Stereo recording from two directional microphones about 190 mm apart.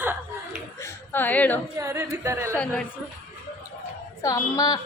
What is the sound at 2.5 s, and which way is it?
Speech, 5° left (ahead or behind).